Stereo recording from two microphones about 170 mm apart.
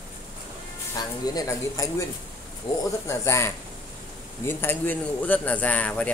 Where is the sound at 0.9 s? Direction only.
20° left (ahead or behind).